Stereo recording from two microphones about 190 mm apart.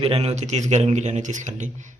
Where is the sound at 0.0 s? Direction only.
30° right (ahead or behind).